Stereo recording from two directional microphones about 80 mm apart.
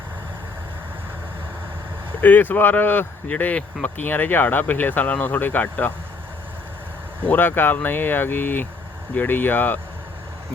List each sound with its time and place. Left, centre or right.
2.2 s speech: left
7.3 s speech: left